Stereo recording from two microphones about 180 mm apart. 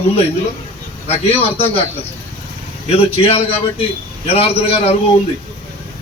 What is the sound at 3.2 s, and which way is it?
A man's voice, 30° left (ahead or behind).